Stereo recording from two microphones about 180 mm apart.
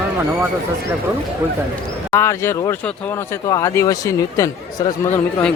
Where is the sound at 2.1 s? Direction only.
15° left (ahead or behind).